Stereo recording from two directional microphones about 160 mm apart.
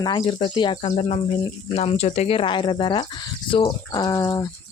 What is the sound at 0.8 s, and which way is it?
Speech, 40° left (ahead or behind).